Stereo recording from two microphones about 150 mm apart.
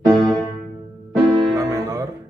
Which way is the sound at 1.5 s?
20° right (ahead or behind).